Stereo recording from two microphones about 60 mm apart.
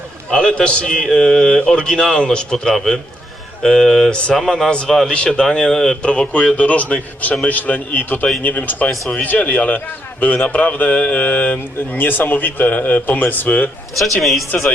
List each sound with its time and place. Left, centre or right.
0.3 s a man's voice: centre
6.0 s a man's voice: centre
13.9 s a man's voice: centre